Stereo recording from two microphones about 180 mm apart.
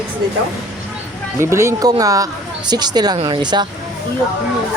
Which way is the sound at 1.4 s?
15° right (ahead or behind).